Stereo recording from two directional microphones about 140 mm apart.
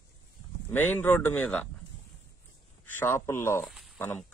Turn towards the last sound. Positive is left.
turn(degrees=0)  # may be behind; listen again after turning